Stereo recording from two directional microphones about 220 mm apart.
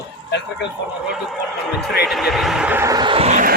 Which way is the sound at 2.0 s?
Centre (ahead or behind).